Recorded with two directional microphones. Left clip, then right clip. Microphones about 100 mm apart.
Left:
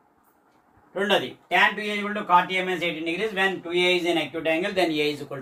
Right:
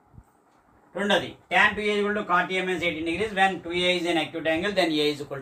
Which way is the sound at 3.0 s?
20° right (ahead or behind).